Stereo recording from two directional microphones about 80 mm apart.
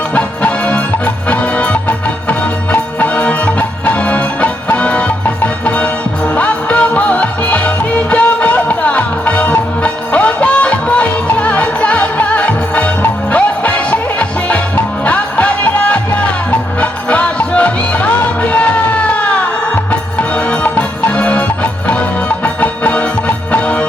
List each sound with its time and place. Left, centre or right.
0.1 s music: centre
3.0 s music: centre